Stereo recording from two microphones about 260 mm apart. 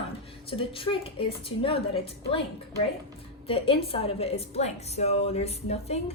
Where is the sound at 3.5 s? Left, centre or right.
Left.